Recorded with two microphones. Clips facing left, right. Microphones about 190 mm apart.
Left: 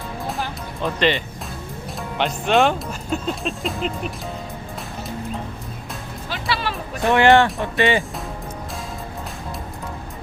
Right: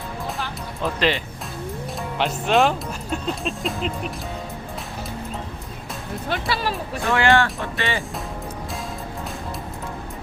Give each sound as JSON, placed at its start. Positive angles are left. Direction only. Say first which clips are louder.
{"t": 0.8, "sound": "speech", "louder": "left 2 dB", "side_deg": 0}
{"t": 6.2, "sound": "music", "louder": "right 1 dB", "side_deg": -50}
{"t": 7.1, "sound": "speech", "louder": "left 4 dB", "side_deg": 20}